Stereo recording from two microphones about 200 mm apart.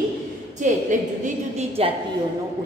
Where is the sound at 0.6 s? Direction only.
40° right (ahead or behind).